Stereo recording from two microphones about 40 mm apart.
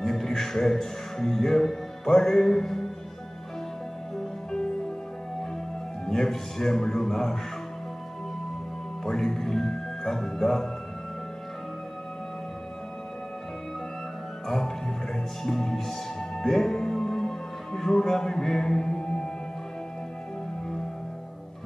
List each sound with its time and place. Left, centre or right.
0.0 s speech: centre
4.2 s music: centre
6.0 s speech: centre
9.0 s speech: centre
15.4 s music: centre